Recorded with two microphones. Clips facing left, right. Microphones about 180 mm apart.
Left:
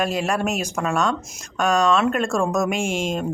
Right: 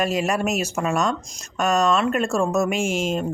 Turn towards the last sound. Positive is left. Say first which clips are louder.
# right 1 dB
turn(degrees=-5)  # may be behind; listen again after turning